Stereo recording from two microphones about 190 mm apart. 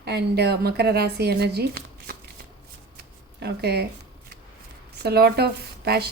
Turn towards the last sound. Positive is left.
turn(degrees=-55)  # may be behind; listen again after turning